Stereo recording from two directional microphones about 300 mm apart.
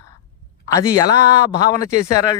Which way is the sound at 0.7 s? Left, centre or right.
Centre.